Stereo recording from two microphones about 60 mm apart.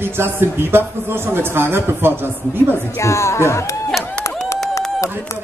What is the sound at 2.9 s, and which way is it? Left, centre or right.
Speech, left.